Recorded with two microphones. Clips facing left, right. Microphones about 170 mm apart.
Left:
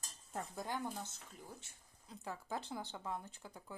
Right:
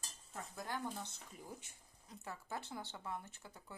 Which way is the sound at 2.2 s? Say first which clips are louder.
Left 3 dB; 15° left (ahead or behind).